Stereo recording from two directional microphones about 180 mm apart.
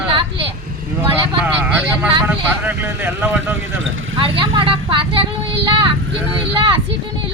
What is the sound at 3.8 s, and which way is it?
Speech, 90° right.